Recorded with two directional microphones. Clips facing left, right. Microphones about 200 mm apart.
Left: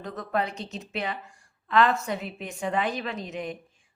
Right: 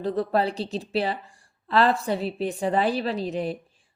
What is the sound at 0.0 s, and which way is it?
A woman's voice, 30° right (ahead or behind).